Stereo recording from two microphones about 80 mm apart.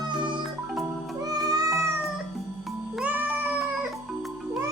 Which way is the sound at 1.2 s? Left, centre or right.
Right.